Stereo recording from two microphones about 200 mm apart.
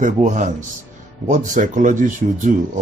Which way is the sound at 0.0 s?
40° right (ahead or behind).